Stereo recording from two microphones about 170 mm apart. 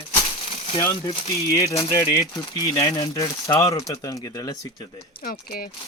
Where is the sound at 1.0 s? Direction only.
35° left (ahead or behind).